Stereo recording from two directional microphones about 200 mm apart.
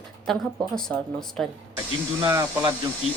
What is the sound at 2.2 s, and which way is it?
Speech, 15° right (ahead or behind).